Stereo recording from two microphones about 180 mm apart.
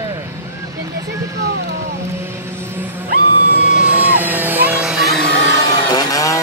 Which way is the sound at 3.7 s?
10° right (ahead or behind).